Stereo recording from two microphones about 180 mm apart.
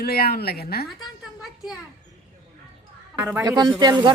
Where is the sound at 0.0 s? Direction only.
60° left (ahead or behind).